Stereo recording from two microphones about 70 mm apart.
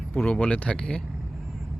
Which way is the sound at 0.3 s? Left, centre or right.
Centre.